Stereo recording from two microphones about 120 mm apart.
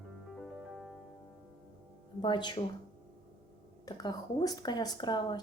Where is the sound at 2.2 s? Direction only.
40° left (ahead or behind).